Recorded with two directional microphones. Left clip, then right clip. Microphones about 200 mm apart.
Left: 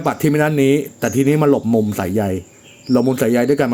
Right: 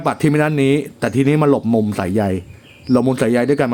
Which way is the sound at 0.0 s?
15° right (ahead or behind).